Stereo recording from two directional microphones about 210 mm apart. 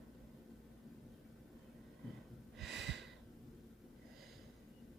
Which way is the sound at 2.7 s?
55° right (ahead or behind).